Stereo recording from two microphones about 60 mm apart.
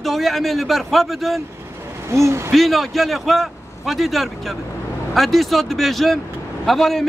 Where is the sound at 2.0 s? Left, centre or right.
Right.